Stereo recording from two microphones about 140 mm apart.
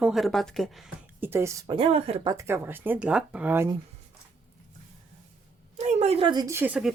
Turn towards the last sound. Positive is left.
turn(degrees=-5)  # may be behind; listen again after turning